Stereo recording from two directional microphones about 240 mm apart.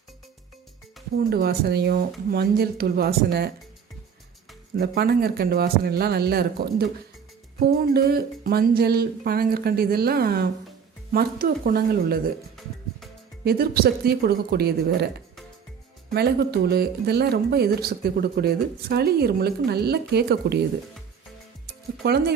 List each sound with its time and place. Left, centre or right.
1.1 s speech: right
4.8 s speech: right
13.4 s speech: right
16.1 s speech: right
22.0 s speech: right